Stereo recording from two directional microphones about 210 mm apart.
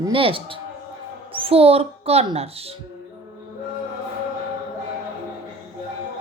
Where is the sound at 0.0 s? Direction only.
25° right (ahead or behind).